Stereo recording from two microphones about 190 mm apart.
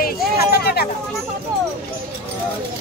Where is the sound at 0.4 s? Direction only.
55° left (ahead or behind).